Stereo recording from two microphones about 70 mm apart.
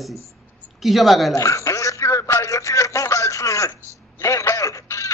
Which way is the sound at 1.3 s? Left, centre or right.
Left.